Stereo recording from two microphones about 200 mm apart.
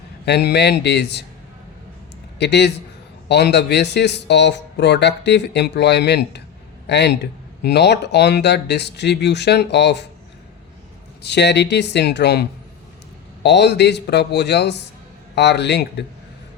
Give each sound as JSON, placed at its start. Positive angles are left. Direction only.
{"t": 0.3, "sound": "a man's voice", "side_deg": 55}
{"t": 2.4, "sound": "a man's voice", "side_deg": 55}
{"t": 11.2, "sound": "a man's voice", "side_deg": 55}